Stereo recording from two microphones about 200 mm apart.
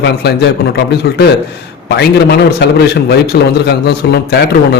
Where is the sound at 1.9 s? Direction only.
60° left (ahead or behind).